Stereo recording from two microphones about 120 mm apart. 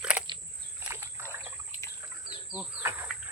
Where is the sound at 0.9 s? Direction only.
20° right (ahead or behind).